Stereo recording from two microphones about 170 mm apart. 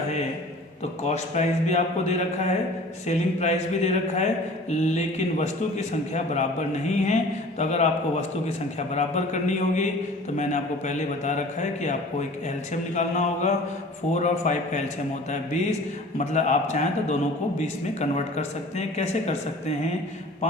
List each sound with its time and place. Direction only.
1.0 s a man's voice: 40° left (ahead or behind)
9.0 s a man's voice: 45° left (ahead or behind)
12.9 s a man's voice: 45° left (ahead or behind)
16.1 s a man's voice: 45° left (ahead or behind)